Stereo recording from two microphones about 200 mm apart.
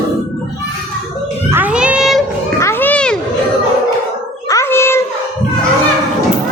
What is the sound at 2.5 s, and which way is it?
Children playing, 10° left (ahead or behind).